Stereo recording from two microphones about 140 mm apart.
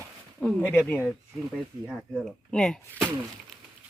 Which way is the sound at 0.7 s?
15° left (ahead or behind).